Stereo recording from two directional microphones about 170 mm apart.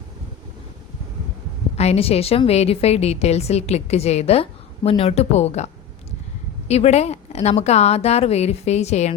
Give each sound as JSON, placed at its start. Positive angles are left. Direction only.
{"t": 1.7, "sound": "a woman's voice", "side_deg": 40}